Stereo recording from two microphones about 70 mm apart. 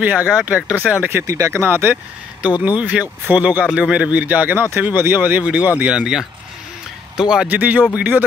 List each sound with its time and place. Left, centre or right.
0.0 s speech: right
1.2 s speech: right
1.7 s speech: right
2.4 s speech: centre
3.6 s speech: centre
7.4 s speech: right